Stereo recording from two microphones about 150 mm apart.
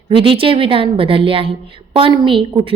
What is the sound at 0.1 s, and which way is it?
A woman's voice, 35° right (ahead or behind).